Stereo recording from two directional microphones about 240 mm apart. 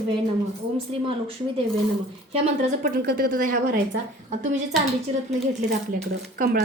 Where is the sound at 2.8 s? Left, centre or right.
Right.